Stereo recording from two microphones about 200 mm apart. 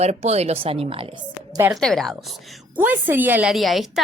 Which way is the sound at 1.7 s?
Centre (ahead or behind).